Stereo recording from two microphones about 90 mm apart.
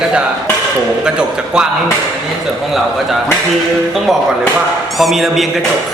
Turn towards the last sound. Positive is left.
turn(degrees=0)  # may be behind; listen again after turning